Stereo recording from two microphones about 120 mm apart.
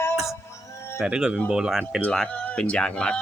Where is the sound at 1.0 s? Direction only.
5° right (ahead or behind).